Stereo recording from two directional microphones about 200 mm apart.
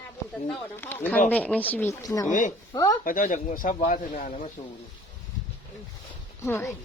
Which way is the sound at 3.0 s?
40° left (ahead or behind).